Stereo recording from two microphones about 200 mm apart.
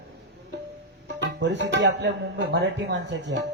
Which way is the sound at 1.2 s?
60° right (ahead or behind).